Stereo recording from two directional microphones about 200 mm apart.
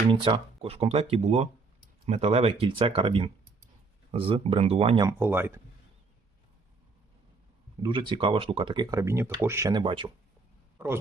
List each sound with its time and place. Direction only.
0.1 s speech: 25° right (ahead or behind)
5.0 s speech: 10° right (ahead or behind)
7.8 s speech: 25° right (ahead or behind)
9.8 s speech: 25° right (ahead or behind)
10.8 s a sound: 10° right (ahead or behind)